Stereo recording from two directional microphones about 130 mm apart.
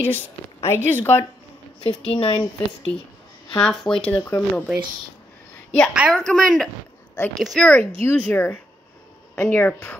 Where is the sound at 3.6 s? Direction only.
5° left (ahead or behind).